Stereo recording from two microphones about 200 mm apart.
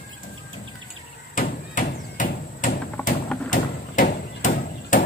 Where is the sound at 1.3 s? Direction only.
40° left (ahead or behind).